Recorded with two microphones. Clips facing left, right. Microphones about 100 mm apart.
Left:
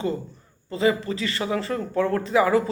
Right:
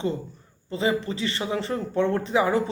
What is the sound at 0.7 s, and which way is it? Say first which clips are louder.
Speech: left 3 dB; 25° right (ahead or behind).